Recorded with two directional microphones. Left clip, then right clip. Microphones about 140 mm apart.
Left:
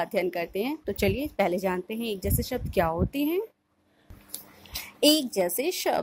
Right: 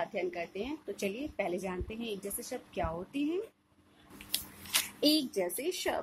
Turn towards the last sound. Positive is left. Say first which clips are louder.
# left 7 dB
turn(degrees=45)  # may be behind; listen again after turning